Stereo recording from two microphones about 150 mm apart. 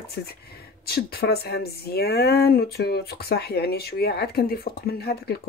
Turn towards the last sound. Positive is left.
turn(degrees=90)